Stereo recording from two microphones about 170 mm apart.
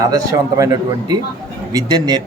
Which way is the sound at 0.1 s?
20° right (ahead or behind).